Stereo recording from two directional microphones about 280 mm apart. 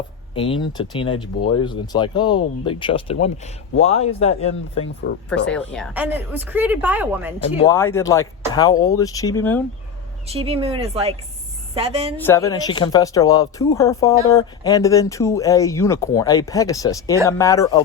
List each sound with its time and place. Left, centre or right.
0.3 s speech: centre
5.0 s speech: left
5.5 s speech: centre
7.7 s speech: centre
10.2 s speech: right
12.1 s speech: centre